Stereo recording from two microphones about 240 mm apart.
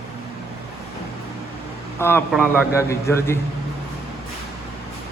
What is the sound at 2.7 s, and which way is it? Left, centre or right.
Speech, centre.